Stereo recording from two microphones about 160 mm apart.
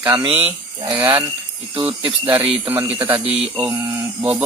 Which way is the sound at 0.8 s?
20° right (ahead or behind).